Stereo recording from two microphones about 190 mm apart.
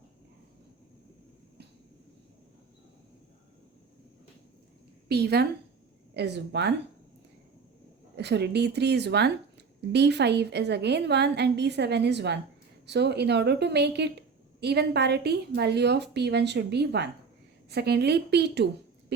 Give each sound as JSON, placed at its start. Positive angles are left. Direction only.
{"t": 5.0, "sound": "speech", "side_deg": -60}
{"t": 8.1, "sound": "a woman's voice", "side_deg": -60}